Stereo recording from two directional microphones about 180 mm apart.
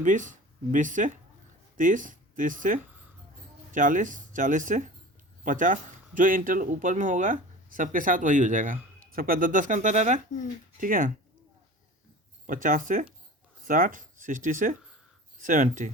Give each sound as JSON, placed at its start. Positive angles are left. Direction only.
{"t": 0.0, "sound": "speech", "side_deg": -45}
{"t": 12.5, "sound": "speech", "side_deg": -50}